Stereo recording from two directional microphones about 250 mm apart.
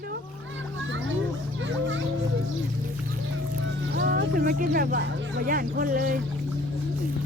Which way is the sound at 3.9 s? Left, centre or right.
Right.